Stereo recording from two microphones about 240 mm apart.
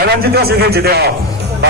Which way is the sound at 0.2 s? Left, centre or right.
Right.